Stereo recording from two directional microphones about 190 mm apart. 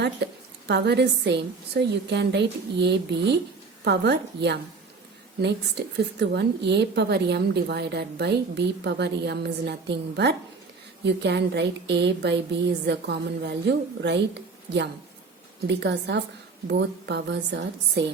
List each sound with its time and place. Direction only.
0.2 s a woman's voice: 60° right (ahead or behind)